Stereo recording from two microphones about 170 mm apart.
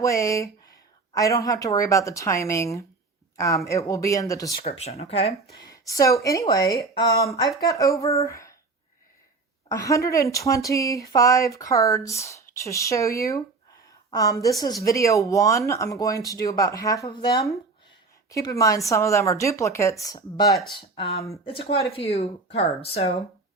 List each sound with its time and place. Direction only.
0.0 s speech: 20° left (ahead or behind)
4.8 s speech: 40° left (ahead or behind)
5.6 s a woman's voice: 20° left (ahead or behind)
9.6 s speech: 20° left (ahead or behind); by 23.1 s 35° left (ahead or behind)